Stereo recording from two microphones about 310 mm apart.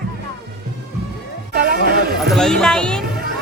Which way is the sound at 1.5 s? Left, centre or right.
Right.